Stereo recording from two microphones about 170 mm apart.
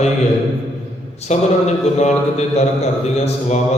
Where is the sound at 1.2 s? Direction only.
40° left (ahead or behind).